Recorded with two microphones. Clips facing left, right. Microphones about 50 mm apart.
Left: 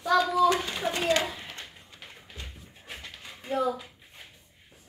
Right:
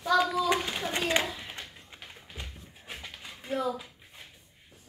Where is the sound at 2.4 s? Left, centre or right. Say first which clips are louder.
Right 1 dB; centre.